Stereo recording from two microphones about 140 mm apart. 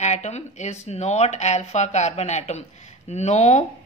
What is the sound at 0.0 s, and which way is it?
A woman's voice, 55° left (ahead or behind).